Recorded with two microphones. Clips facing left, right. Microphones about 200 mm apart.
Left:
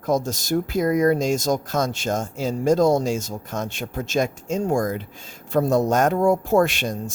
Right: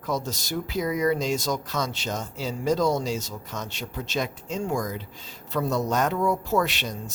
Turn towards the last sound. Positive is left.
turn(degrees=50)  # may be behind; listen again after turning